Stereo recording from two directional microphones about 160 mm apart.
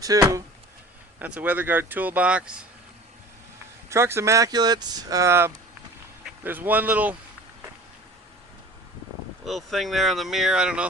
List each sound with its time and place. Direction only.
0.0 s speech: 20° right (ahead or behind)
1.2 s speech: 10° right (ahead or behind)
3.8 s speech: 15° right (ahead or behind)
9.4 s speech: centre (ahead or behind)